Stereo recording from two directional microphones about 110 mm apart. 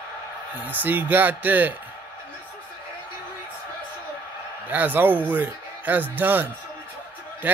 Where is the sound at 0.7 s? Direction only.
15° right (ahead or behind).